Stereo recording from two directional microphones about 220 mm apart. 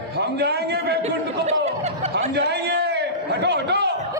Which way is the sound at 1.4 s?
30° right (ahead or behind).